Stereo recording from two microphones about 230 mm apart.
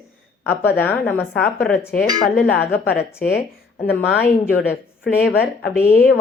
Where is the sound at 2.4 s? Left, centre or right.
Left.